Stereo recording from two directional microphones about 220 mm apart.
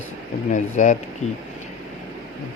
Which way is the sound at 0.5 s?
35° left (ahead or behind).